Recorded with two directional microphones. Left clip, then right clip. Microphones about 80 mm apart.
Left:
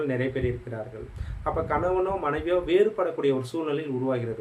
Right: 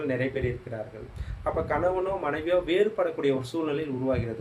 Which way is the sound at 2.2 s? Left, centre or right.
Left.